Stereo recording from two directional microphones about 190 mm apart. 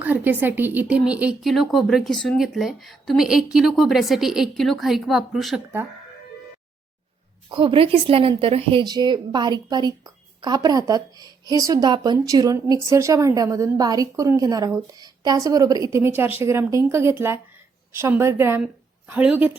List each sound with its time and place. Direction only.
0.0 s speech: 10° right (ahead or behind)
7.5 s a woman's voice: 30° right (ahead or behind); by 19.5 s 5° right (ahead or behind)